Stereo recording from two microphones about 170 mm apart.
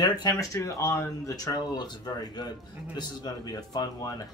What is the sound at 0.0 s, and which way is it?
Speech, 25° left (ahead or behind).